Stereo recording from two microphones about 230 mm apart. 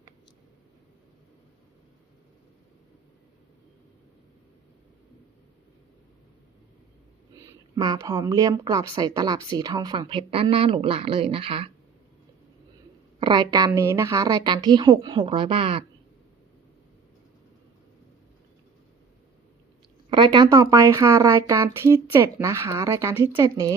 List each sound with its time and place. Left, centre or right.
7.4 s a woman's voice: centre
13.1 s a woman's voice: centre
20.1 s speech: centre